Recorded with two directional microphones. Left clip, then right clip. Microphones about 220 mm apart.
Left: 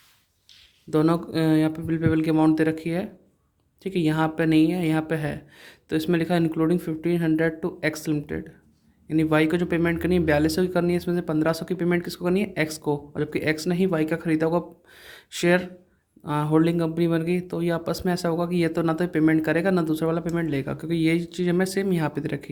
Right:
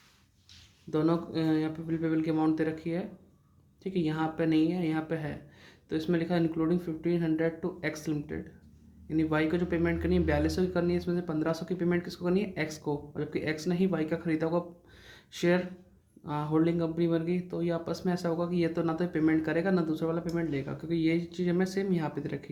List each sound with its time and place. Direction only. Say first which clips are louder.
0.9 s speech: left 7 dB; 40° left (ahead or behind)